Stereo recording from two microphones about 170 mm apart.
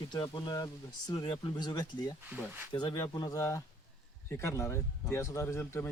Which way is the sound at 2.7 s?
25° left (ahead or behind).